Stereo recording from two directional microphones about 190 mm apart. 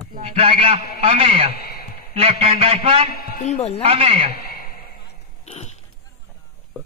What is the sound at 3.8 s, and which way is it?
Speech, 30° right (ahead or behind).